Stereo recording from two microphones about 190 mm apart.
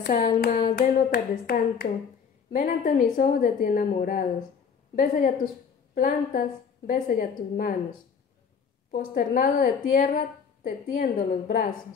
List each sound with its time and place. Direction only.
0.0 s hands: 45° left (ahead or behind)
0.7 s a woman's voice: 45° left (ahead or behind)
9.1 s a woman's voice: 45° left (ahead or behind)